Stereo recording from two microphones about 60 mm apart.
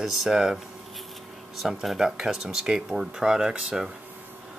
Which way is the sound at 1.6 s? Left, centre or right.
Centre.